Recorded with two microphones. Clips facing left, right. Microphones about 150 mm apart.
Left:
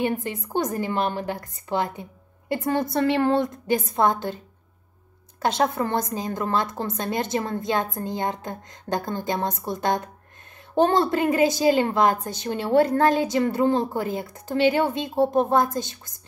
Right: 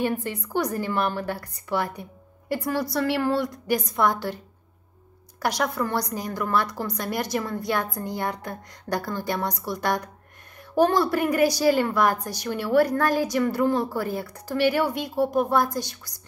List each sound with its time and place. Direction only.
0.0 s a woman's voice: 20° left (ahead or behind)
5.4 s a woman's voice: 25° left (ahead or behind)